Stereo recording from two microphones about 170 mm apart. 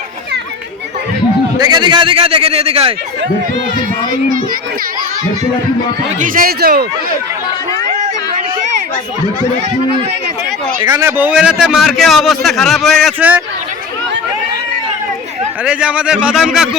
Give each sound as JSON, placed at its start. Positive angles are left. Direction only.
{"t": 1.5, "sound": "a man's voice", "side_deg": -25}
{"t": 6.1, "sound": "a man's voice", "side_deg": -55}
{"t": 10.8, "sound": "a man's voice", "side_deg": -15}
{"t": 13.1, "sound": "speech", "side_deg": -10}
{"t": 15.6, "sound": "a man's voice", "side_deg": -5}